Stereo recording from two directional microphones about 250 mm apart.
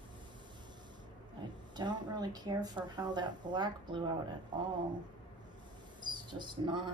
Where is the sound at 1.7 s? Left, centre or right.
Centre.